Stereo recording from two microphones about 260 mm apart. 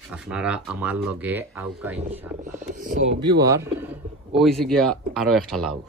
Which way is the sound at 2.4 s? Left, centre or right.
Right.